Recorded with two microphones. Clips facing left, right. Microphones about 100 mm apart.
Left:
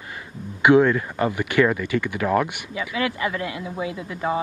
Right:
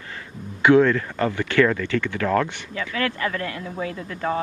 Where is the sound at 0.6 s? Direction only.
20° left (ahead or behind).